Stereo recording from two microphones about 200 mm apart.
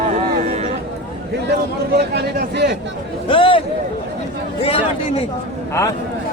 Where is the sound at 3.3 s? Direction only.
25° left (ahead or behind).